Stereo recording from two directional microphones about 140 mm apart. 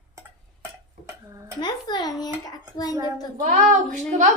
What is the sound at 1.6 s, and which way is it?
A child's voice, 30° left (ahead or behind).